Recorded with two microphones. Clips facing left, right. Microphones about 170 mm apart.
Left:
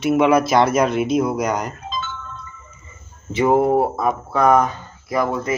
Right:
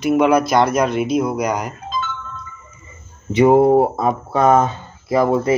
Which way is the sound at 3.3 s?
20° right (ahead or behind).